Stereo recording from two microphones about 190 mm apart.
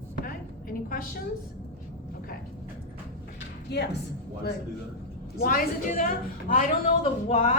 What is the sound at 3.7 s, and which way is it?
Speech, 60° left (ahead or behind).